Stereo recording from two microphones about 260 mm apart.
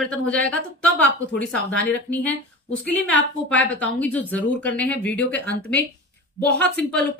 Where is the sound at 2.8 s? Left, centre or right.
Centre.